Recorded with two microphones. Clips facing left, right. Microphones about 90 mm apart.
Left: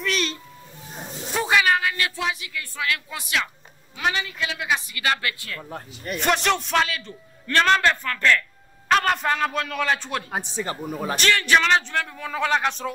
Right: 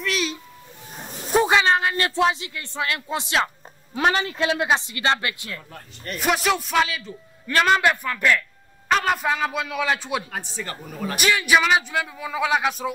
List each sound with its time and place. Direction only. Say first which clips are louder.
0.0 s music: even; centre (ahead or behind)
1.3 s speech: right 3 dB; 25° right (ahead or behind)
3.9 s a woman's voice: right 5 dB; 40° right (ahead or behind); by 5.6 s 20° right (ahead or behind)
5.6 s speech: left 6 dB; 30° left (ahead or behind)
6.0 s a man's voice: even; 5° right (ahead or behind)
10.3 s speech: left 4 dB; 20° left (ahead or behind)
11.1 s speech: right 1 dB; 10° right (ahead or behind)